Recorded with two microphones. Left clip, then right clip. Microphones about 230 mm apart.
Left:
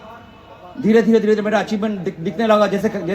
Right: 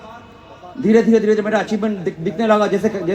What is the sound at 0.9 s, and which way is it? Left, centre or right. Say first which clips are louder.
A man's voice: right 1 dB; left.